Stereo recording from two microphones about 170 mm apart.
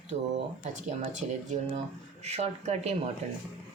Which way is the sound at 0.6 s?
45° right (ahead or behind).